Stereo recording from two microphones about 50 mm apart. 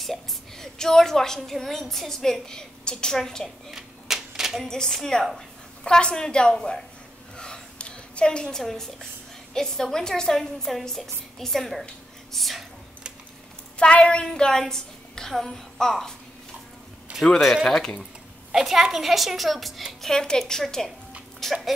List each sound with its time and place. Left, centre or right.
0.0 s a woman's voice: centre
3.7 s typewriter: centre
4.6 s a woman's voice: centre
7.3 s a sound: centre
9.5 s a woman's voice: centre
13.7 s a woman's voice: left
17.6 s a woman's voice: centre
18.5 s a woman's voice: centre